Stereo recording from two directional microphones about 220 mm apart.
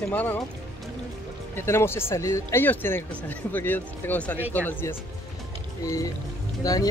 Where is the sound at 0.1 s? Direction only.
10° left (ahead or behind).